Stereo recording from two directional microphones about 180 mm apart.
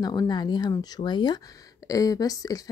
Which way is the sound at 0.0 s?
20° left (ahead or behind).